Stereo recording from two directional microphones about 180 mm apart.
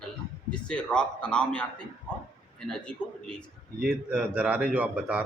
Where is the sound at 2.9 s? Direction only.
5° left (ahead or behind).